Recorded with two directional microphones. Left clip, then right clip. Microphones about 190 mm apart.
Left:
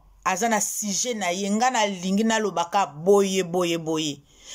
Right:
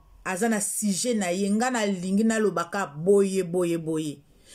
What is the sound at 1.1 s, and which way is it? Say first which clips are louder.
Speech: right 1 dB; 35° right (ahead or behind).